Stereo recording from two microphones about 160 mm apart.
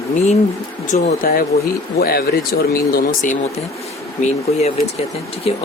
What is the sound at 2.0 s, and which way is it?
Speech, 70° left (ahead or behind).